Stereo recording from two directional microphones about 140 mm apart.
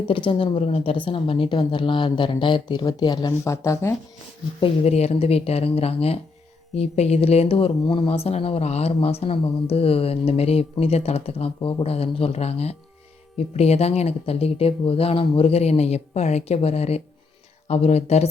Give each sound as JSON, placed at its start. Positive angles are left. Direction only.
{"t": 0.1, "sound": "a woman's voice", "side_deg": 40}
{"t": 4.6, "sound": "speech", "side_deg": 50}